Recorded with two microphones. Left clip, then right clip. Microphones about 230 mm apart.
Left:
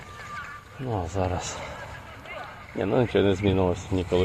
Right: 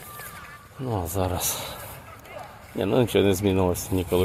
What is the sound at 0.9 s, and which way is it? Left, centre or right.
Speech, right.